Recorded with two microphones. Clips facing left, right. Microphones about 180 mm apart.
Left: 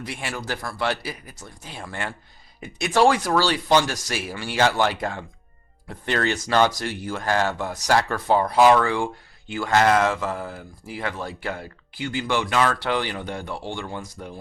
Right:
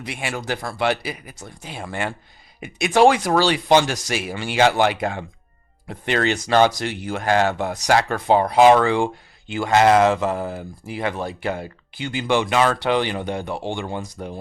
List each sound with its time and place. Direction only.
0.0 s speech: 20° right (ahead or behind)